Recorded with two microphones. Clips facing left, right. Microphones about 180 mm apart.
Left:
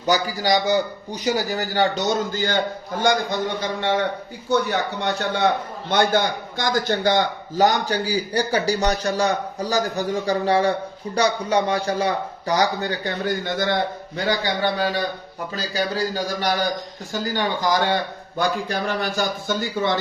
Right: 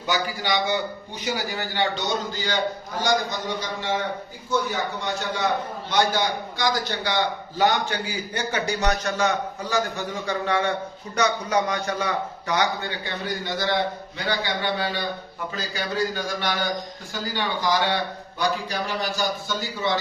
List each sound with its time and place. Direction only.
0.0 s a man's voice: 40° left (ahead or behind)